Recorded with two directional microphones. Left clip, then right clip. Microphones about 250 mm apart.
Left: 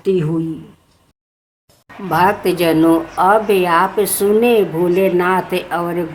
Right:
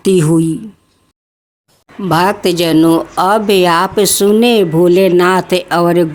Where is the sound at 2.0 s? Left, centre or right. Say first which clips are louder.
Right 2 dB; right.